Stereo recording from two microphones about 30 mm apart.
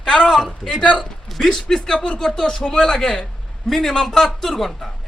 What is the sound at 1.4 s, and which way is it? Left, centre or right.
Speech, centre.